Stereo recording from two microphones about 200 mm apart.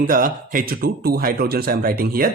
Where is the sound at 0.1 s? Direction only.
45° right (ahead or behind).